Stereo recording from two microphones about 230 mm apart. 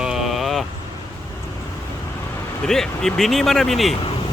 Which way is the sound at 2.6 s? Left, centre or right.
Centre.